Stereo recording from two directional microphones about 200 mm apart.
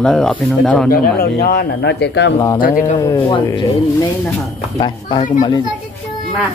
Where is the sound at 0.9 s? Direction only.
50° left (ahead or behind).